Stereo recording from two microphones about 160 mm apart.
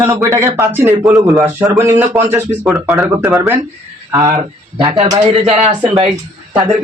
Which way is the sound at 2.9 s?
Centre (ahead or behind).